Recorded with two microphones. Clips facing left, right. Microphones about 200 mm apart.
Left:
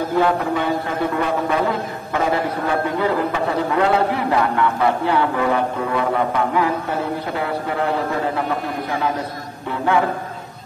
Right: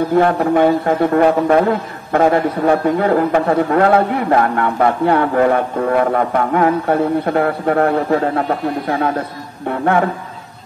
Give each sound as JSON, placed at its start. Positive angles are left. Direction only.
{"t": 0.1, "sound": "a man's voice", "side_deg": -55}
{"t": 9.7, "sound": "a man's voice", "side_deg": -55}